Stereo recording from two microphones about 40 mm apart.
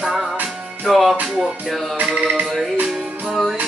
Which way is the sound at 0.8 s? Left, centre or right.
Centre.